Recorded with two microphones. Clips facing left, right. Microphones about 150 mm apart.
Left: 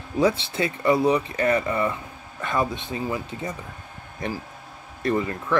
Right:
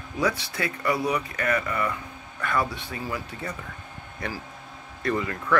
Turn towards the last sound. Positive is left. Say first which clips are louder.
# left 3 dB
turn(degrees=25)  # may be behind; listen again after turning